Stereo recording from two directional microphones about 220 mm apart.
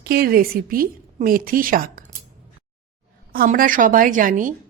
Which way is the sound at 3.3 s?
40° right (ahead or behind).